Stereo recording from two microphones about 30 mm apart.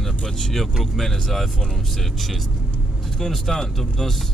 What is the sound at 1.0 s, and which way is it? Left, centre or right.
Speech, centre.